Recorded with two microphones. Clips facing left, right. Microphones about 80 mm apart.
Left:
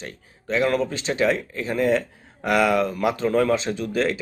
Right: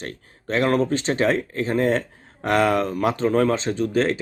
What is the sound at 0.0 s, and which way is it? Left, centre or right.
Speech, right.